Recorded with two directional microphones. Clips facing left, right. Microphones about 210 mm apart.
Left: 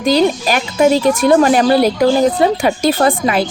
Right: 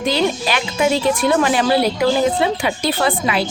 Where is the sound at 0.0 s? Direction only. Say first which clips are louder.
Left 5 dB; 40° left (ahead or behind).